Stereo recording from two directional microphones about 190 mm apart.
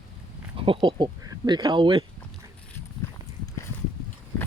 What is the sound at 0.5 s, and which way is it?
Speech, 25° right (ahead or behind).